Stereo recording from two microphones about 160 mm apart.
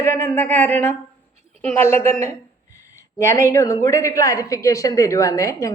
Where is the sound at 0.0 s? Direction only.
15° left (ahead or behind).